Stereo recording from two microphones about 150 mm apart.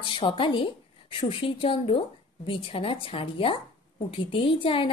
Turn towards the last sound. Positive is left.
turn(degrees=35)  # may be behind; listen again after turning